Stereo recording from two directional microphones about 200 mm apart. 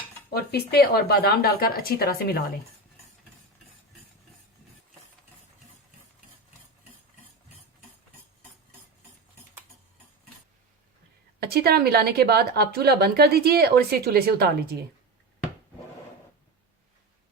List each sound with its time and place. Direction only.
0.3 s speech: 50° left (ahead or behind)
11.3 s a woman's voice: 50° right (ahead or behind)